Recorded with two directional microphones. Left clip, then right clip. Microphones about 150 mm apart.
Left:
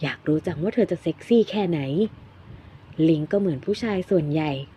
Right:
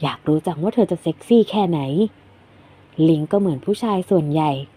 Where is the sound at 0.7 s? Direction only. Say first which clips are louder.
Right 3 dB; 10° right (ahead or behind).